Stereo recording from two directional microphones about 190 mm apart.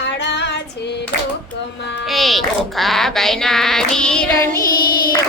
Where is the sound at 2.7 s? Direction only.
Centre (ahead or behind).